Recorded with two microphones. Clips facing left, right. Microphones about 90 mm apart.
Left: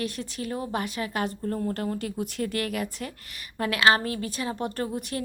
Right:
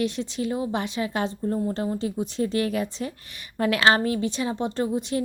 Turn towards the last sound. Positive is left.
turn(degrees=-20)  # may be behind; listen again after turning